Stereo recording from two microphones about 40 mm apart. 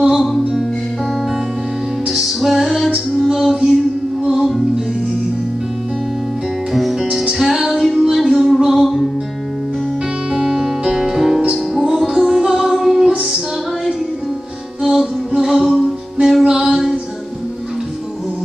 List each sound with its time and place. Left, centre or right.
0.1 s music: centre
2.1 s music: centre
2.6 s female singing: centre
3.2 s music: centre
6.7 s music: centre
8.7 s music: centre
10.3 s music: centre
14.8 s music: centre
16.4 s a sound: centre